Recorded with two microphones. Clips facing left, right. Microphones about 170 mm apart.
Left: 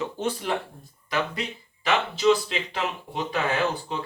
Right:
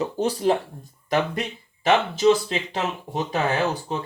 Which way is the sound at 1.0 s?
50° right (ahead or behind).